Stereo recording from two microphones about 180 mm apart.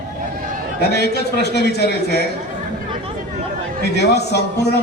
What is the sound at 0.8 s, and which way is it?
A man's voice, 65° left (ahead or behind).